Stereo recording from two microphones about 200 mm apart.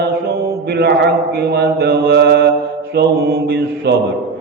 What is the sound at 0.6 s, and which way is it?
Mantra, 55° right (ahead or behind).